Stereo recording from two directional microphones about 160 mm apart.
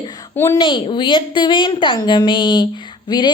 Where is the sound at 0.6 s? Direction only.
30° left (ahead or behind).